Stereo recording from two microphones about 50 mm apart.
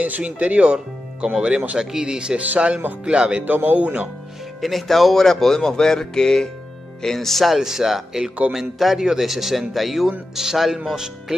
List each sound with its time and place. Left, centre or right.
0.0 s speech: right
2.4 s speech: right
3.4 s speech: right
4.6 s speech: centre